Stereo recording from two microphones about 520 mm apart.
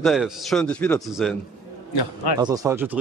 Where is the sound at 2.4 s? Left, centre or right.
Centre.